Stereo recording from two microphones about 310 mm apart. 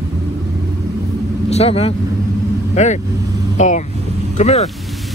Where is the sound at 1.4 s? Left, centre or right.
Centre.